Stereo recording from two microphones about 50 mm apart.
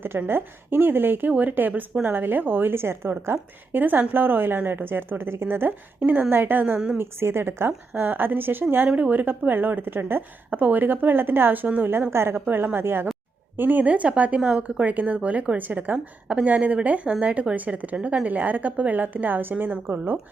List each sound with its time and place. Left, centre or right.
0.3 s a woman's voice: right
1.3 s a woman's voice: right
3.7 s a woman's voice: right
6.7 s speech: right
7.0 s speech: right
7.9 s a woman's voice: right
12.1 s a woman's voice: right
13.6 s a woman's voice: right